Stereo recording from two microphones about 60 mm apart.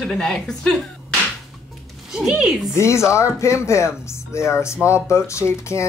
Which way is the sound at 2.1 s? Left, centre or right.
Centre.